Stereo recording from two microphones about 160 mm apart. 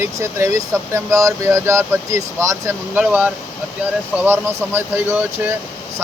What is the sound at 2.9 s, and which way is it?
Speech, 10° right (ahead or behind).